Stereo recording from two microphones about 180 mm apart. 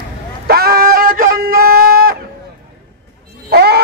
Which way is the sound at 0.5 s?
60° right (ahead or behind).